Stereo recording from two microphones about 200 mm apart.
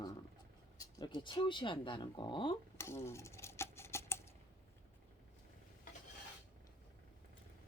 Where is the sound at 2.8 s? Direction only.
15° left (ahead or behind).